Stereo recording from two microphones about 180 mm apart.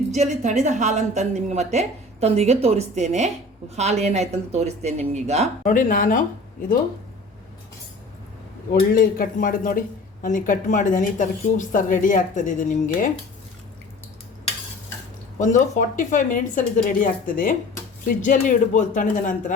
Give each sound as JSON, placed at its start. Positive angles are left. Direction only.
{"t": 0.1, "sound": "a woman's voice", "side_deg": -40}
{"t": 5.6, "sound": "speech", "side_deg": 50}
{"t": 8.7, "sound": "speech", "side_deg": 50}
{"t": 15.4, "sound": "speech", "side_deg": 45}